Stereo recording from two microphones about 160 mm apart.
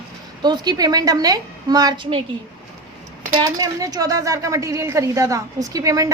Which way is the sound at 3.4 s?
25° right (ahead or behind).